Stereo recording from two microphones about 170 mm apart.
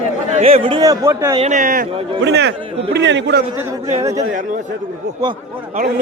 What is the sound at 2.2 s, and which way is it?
A man's voice, 90° right.